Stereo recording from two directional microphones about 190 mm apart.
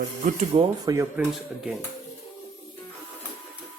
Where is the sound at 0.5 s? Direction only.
25° right (ahead or behind).